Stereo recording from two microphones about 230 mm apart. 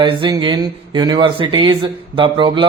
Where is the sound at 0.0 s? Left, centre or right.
Centre.